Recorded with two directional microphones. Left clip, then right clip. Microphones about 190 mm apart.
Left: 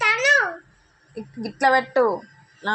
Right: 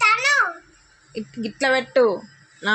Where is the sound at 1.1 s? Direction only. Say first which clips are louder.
Right 3 dB; 30° right (ahead or behind).